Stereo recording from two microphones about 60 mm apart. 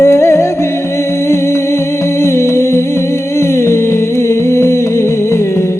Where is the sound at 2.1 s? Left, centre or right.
Left.